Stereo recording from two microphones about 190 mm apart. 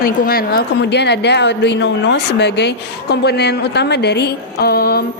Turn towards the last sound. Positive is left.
turn(degrees=55)  # may be behind; listen again after turning